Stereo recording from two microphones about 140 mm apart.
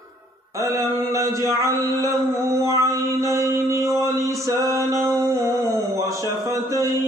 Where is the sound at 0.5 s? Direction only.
20° right (ahead or behind).